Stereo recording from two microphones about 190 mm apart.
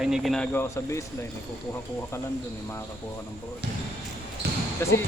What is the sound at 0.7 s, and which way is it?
Speech, 15° left (ahead or behind).